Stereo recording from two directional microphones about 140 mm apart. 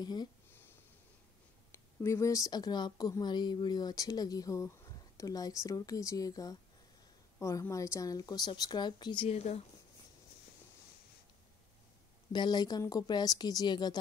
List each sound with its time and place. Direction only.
0.0 s a woman's voice: 30° left (ahead or behind)
1.7 s a woman's voice: 20° left (ahead or behind); by 9.6 s 50° left (ahead or behind)
12.3 s a woman's voice: 30° left (ahead or behind)